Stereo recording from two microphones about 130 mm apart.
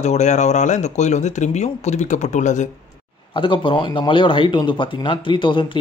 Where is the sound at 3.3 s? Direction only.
40° left (ahead or behind).